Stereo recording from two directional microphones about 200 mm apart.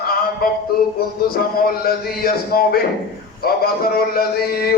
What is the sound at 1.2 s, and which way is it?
A man's voice, 50° left (ahead or behind).